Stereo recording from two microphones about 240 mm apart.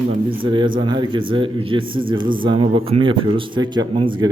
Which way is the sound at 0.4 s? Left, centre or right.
Centre.